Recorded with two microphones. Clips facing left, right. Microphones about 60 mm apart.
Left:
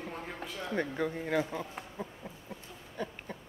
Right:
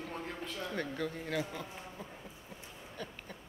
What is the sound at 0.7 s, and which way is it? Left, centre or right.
Speech, left.